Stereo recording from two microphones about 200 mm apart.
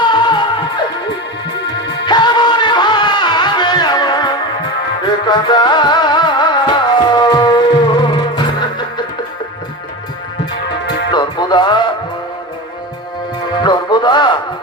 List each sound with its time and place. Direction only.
0.0 s music: 20° left (ahead or behind)
10.8 s music: 60° left (ahead or behind)
11.1 s music: 20° left (ahead or behind)
13.6 s music: 20° left (ahead or behind)